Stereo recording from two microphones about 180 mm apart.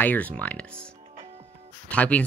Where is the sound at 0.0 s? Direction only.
10° left (ahead or behind).